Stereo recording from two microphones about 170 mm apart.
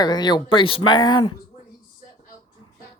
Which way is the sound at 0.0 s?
25° left (ahead or behind).